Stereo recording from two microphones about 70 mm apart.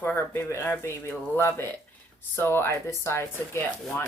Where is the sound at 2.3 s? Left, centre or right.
Left.